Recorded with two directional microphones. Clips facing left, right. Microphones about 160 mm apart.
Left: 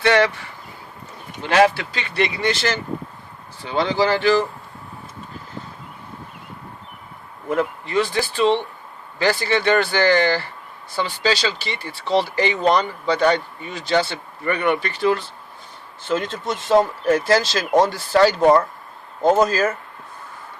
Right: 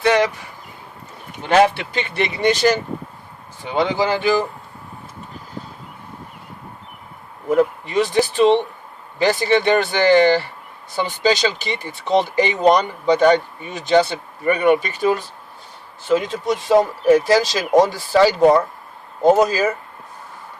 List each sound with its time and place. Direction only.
0.0 s speech: 15° right (ahead or behind)
1.5 s speech: 20° right (ahead or behind)
7.5 s speech: 15° right (ahead or behind)